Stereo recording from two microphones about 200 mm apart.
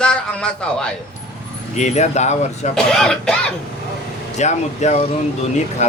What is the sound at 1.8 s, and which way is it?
Speech, 35° left (ahead or behind).